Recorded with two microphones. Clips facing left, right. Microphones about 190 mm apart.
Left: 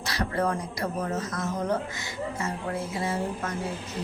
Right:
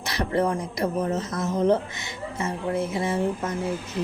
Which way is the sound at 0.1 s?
20° right (ahead or behind).